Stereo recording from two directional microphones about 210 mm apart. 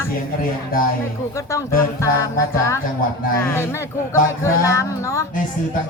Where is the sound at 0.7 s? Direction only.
45° left (ahead or behind).